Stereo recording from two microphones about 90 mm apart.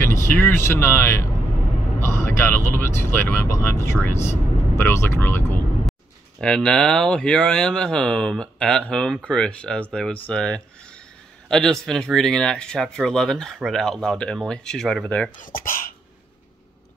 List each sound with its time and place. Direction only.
0.1 s speech: 30° left (ahead or behind)
6.4 s speech: 10° left (ahead or behind)